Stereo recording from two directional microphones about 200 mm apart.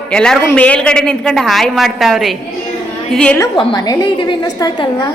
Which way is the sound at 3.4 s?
20° left (ahead or behind).